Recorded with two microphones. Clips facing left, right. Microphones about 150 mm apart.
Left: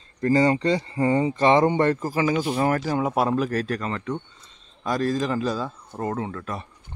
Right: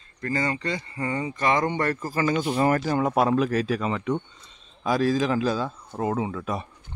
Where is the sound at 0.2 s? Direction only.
30° left (ahead or behind); by 6.7 s 10° right (ahead or behind).